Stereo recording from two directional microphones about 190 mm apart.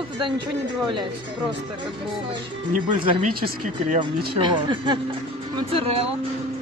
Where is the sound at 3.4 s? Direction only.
50° right (ahead or behind).